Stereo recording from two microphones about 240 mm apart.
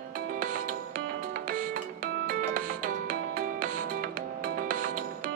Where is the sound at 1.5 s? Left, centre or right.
Right.